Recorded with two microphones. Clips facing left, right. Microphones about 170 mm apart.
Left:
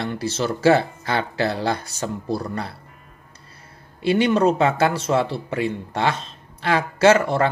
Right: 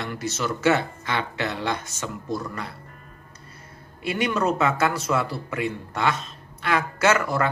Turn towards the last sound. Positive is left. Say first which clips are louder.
# left 5 dB
turn(degrees=30)  # may be behind; listen again after turning